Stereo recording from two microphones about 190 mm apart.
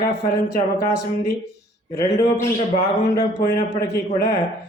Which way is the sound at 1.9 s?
15° left (ahead or behind).